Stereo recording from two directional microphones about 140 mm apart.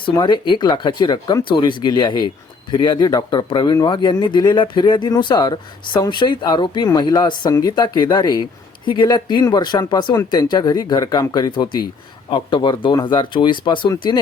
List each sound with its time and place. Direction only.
0.0 s speech: 35° left (ahead or behind)